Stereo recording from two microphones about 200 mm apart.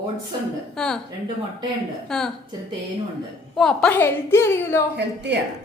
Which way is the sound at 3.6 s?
5° left (ahead or behind).